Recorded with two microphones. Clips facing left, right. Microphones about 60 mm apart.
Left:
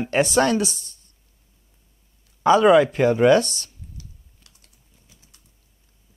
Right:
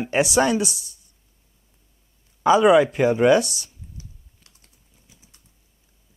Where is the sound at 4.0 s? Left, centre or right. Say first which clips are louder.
Even; right.